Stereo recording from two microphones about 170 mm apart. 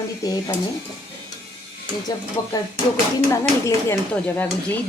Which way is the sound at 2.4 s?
20° left (ahead or behind).